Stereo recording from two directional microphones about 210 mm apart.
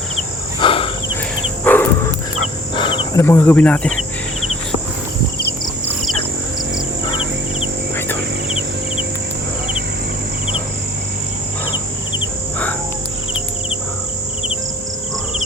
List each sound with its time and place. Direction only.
0.6 s insect: 25° left (ahead or behind)
1.6 s dog: 10° left (ahead or behind)
2.7 s insect: 25° left (ahead or behind)
3.2 s speech: 10° left (ahead or behind)
7.9 s cricket: 10° left (ahead or behind)